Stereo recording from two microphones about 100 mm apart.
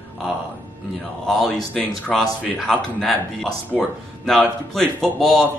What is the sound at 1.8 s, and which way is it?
Speech, centre (ahead or behind).